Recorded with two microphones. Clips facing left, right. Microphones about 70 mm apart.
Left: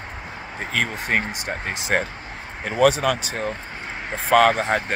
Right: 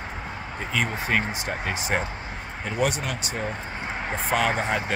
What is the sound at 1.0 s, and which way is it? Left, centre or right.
Speech, left.